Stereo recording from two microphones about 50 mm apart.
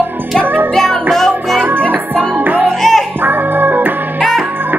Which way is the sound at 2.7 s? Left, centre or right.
Centre.